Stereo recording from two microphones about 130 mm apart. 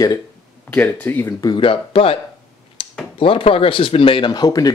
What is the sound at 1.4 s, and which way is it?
Speech, 40° left (ahead or behind).